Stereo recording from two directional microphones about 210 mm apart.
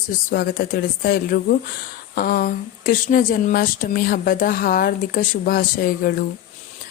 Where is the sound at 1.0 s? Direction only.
45° left (ahead or behind).